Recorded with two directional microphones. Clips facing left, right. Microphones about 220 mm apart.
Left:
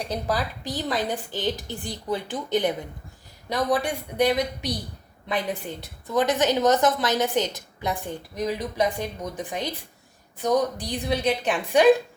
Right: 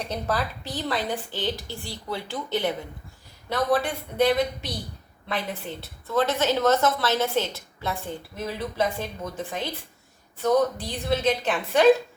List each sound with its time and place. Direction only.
0.3 s a woman's voice: 15° left (ahead or behind)